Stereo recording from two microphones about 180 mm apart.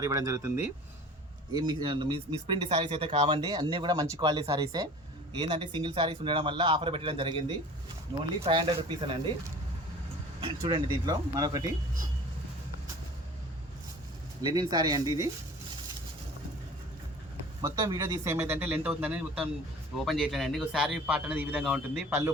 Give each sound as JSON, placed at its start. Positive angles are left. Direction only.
{"t": 0.0, "sound": "speech", "side_deg": -15}
{"t": 1.8, "sound": "speech", "side_deg": -30}
{"t": 8.4, "sound": "speech", "side_deg": -25}
{"t": 10.4, "sound": "speech", "side_deg": -30}
{"t": 14.4, "sound": "speech", "side_deg": -20}
{"t": 17.6, "sound": "a man's voice", "side_deg": -20}